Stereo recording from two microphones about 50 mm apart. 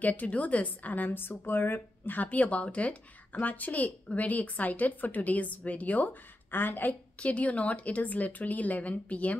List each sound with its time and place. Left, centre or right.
0.0 s a woman's voice: left
7.2 s speech: left